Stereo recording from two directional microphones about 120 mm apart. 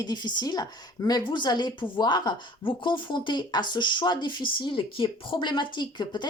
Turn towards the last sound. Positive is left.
turn(degrees=40)  # may be behind; listen again after turning